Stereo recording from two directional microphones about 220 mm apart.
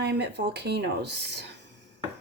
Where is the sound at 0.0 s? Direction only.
50° right (ahead or behind).